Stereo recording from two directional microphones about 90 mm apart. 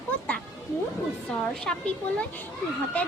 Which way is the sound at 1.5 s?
10° left (ahead or behind).